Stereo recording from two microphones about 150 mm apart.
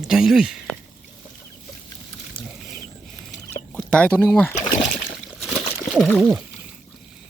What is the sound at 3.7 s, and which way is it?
Speech, 5° left (ahead or behind).